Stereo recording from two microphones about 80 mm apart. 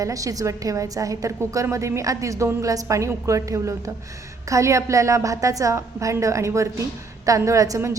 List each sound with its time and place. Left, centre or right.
0.0 s a woman's voice: right